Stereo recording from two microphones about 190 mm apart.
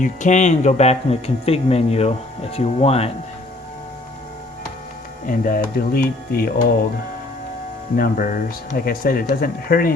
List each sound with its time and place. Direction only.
0.0 s speech: 40° left (ahead or behind)
5.2 s speech: 45° left (ahead or behind)
7.9 s speech: 45° left (ahead or behind)